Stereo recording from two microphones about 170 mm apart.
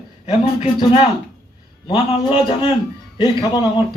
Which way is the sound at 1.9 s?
30° left (ahead or behind).